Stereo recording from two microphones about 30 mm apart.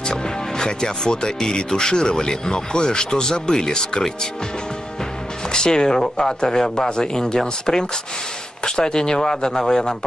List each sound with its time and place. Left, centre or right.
0.0 s speech: left
5.5 s speech: left